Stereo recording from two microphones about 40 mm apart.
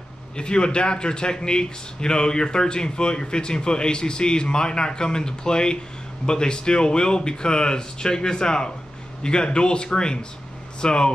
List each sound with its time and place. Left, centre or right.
0.4 s a man's voice: left